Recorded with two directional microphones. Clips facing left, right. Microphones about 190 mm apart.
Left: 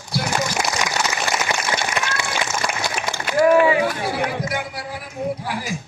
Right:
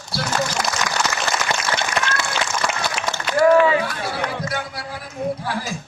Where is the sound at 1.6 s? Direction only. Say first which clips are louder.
Right 1 dB; 15° left (ahead or behind).